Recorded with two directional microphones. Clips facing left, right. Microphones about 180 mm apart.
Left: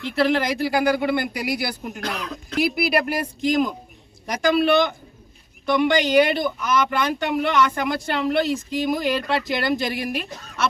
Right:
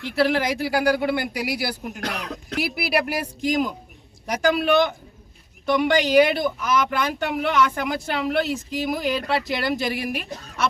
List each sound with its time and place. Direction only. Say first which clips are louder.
0.2 s speech: left 1 dB; 10° right (ahead or behind)
2.0 s speech: even; 65° right (ahead or behind)
2.7 s speech: left 2 dB; 5° right (ahead or behind)